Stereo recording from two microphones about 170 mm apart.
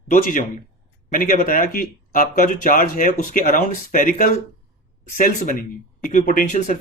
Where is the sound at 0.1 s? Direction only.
50° left (ahead or behind).